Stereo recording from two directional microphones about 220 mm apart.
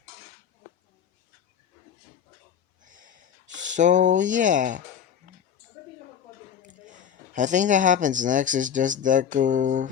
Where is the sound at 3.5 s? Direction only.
35° right (ahead or behind).